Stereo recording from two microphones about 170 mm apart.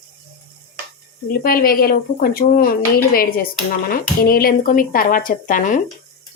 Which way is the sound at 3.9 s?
60° left (ahead or behind).